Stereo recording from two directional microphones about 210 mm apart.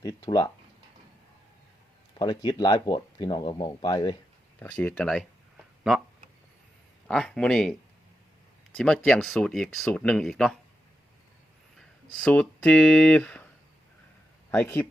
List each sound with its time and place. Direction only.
0.0 s speech: 15° left (ahead or behind)
2.1 s speech: 20° left (ahead or behind)
4.6 s speech: 5° left (ahead or behind)
7.1 s speech: 5° left (ahead or behind)
12.1 s speech: 5° left (ahead or behind)
14.5 s speech: 5° left (ahead or behind)